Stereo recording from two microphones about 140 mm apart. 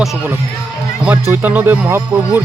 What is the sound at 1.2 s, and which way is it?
A man's voice, 15° right (ahead or behind).